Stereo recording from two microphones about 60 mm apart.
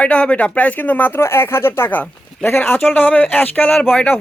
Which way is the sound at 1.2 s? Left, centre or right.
Left.